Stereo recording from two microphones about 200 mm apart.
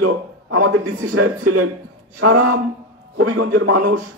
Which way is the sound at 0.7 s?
90° right.